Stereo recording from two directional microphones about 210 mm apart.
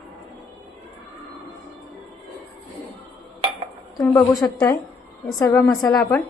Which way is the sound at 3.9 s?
15° left (ahead or behind).